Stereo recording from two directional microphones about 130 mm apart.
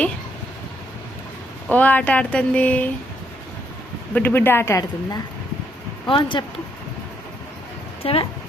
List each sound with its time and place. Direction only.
1.7 s speech: 10° left (ahead or behind)
4.1 s speech: 15° left (ahead or behind)
6.1 s speech: 40° left (ahead or behind)
8.0 s speech: 45° left (ahead or behind)